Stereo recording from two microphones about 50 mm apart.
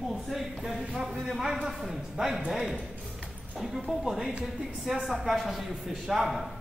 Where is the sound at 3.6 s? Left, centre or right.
Centre.